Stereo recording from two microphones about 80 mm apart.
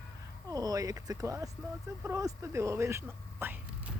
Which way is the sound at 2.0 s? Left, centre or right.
Right.